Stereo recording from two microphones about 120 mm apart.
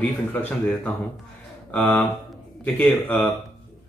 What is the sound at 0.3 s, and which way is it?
Speech, 15° left (ahead or behind).